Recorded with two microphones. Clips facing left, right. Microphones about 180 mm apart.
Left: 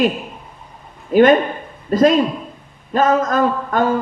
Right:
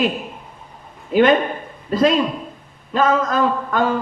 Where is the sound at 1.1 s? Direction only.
45° left (ahead or behind).